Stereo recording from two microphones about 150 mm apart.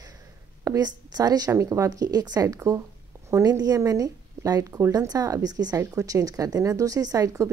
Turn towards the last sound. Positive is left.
turn(degrees=-20)  # may be behind; listen again after turning